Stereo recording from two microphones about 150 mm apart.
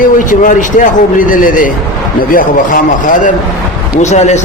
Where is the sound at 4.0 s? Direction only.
50° left (ahead or behind).